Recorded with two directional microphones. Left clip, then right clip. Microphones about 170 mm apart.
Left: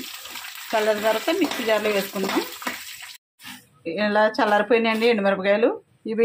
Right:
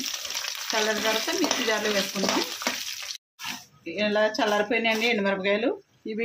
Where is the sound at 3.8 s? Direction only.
25° left (ahead or behind).